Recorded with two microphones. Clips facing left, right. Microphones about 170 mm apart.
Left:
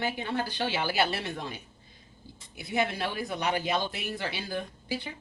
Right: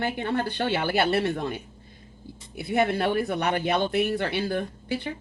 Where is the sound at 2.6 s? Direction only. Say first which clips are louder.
Right 6 dB; 55° right (ahead or behind).